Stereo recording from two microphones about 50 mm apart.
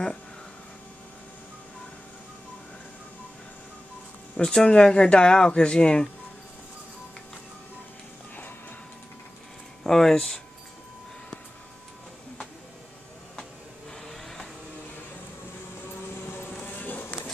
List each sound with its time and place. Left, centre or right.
4.4 s speech: centre
9.8 s speech: centre
14.0 s vehicle: centre
16.3 s vehicle: left
16.6 s music: left